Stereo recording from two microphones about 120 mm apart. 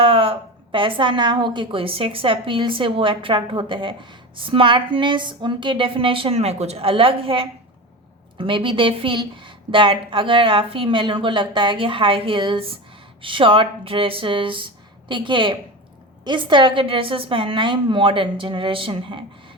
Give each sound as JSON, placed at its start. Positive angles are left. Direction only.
{"t": 0.0, "sound": "a woman's voice", "side_deg": -50}